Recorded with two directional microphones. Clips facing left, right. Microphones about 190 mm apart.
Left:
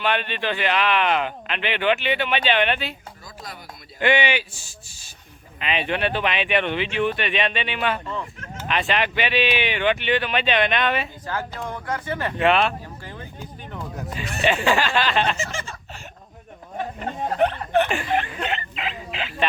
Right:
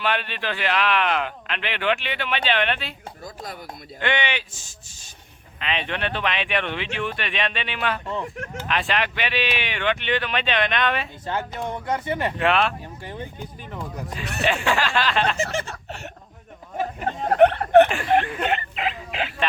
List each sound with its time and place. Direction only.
0.0 s speech: centre (ahead or behind)
3.2 s speech: 50° right (ahead or behind)
4.0 s speech: 10° left (ahead or behind)
11.3 s speech: 25° right (ahead or behind)
12.4 s speech: centre (ahead or behind)
14.4 s speech: centre (ahead or behind)
15.4 s a sound: 65° right (ahead or behind)
17.1 s speech: 60° right (ahead or behind)
18.4 s a sound: 50° right (ahead or behind)